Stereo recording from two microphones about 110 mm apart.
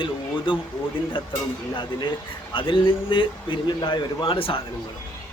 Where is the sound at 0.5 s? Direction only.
50° left (ahead or behind).